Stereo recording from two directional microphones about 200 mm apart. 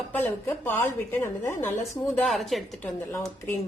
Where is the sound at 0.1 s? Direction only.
10° left (ahead or behind).